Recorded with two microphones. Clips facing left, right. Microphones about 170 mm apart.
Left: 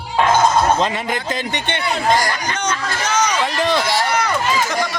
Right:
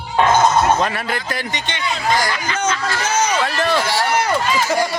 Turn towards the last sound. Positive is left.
turn(degrees=15)  # may be behind; listen again after turning